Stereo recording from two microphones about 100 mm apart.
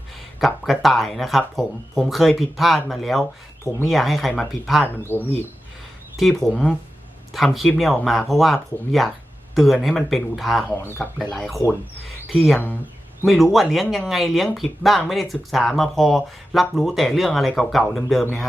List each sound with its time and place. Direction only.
0.3 s speech: centre (ahead or behind)
5.0 s speech: 20° left (ahead or behind)
6.1 s speech: centre (ahead or behind)
10.8 s speech: 20° left (ahead or behind)
11.2 s speech: 5° left (ahead or behind)